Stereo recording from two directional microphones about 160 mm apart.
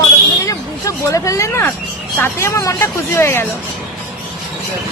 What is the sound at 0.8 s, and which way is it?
Speech, 20° left (ahead or behind).